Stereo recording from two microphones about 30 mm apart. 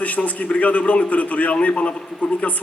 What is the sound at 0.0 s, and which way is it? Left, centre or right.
A man's voice, left.